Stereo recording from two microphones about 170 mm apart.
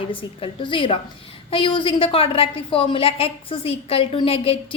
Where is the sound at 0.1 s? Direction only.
30° left (ahead or behind).